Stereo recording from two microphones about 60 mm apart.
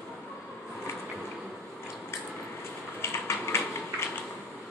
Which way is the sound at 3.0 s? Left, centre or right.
Left.